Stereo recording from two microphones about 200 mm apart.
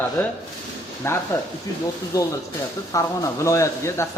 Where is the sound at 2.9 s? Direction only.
15° left (ahead or behind).